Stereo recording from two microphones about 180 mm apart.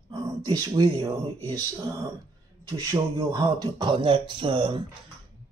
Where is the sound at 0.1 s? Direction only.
20° right (ahead or behind).